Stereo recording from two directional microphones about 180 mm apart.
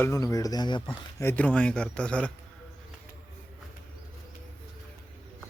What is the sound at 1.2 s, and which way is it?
Speech, 10° left (ahead or behind).